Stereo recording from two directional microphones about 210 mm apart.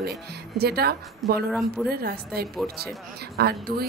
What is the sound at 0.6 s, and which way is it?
Speech, 50° right (ahead or behind).